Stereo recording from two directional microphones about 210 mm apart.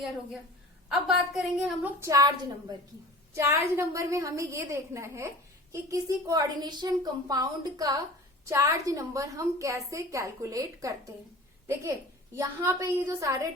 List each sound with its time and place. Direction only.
0.9 s a woman's voice: centre (ahead or behind)
3.3 s a woman's voice: 15° right (ahead or behind)